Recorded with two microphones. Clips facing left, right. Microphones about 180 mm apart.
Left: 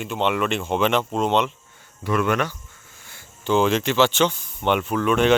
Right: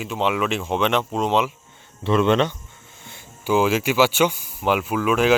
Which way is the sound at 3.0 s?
20° right (ahead or behind).